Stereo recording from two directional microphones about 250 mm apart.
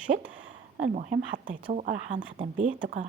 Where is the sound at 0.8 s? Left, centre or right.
Right.